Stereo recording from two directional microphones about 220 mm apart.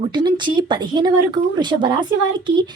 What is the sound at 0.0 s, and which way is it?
A woman's voice, 20° right (ahead or behind).